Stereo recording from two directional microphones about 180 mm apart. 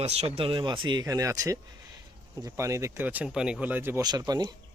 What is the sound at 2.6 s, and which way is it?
Speech, 15° right (ahead or behind).